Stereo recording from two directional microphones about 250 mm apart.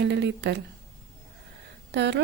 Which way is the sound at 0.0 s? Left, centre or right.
Right.